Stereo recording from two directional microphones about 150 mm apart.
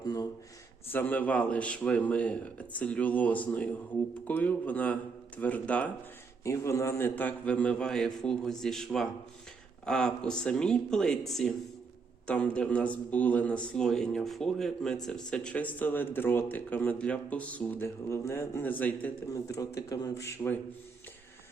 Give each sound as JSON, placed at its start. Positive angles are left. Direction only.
{"t": 0.0, "sound": "a sound", "side_deg": 25}
{"t": 0.9, "sound": "speech", "side_deg": 15}
{"t": 19.3, "sound": "speech", "side_deg": 25}